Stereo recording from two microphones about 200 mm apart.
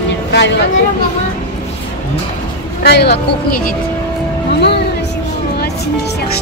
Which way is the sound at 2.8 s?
55° left (ahead or behind).